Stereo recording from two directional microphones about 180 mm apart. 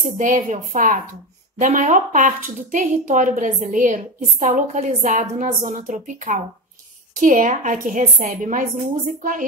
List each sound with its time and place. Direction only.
0.0 s speech: 45° right (ahead or behind)